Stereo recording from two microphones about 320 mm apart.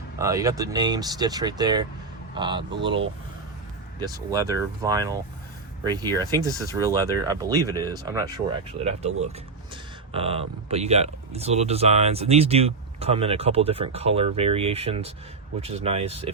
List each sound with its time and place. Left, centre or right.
0.2 s speech: centre
4.0 s speech: centre